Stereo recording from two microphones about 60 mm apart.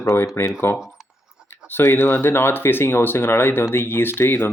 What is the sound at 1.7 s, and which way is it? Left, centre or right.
Speech, left.